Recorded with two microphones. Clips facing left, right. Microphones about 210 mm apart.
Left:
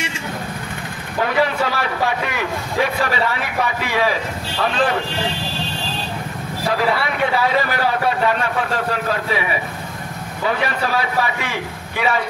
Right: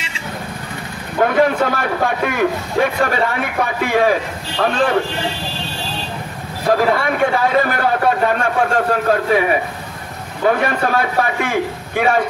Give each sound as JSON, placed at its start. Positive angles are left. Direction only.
{"t": 1.2, "sound": "a man's voice", "side_deg": -50}
{"t": 6.7, "sound": "a man's voice", "side_deg": -45}